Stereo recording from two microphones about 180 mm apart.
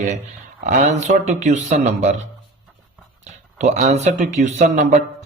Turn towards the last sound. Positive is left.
turn(degrees=-40)  # may be behind; listen again after turning